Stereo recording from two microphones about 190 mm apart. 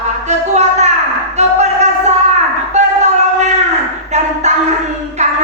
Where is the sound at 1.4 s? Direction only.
35° right (ahead or behind).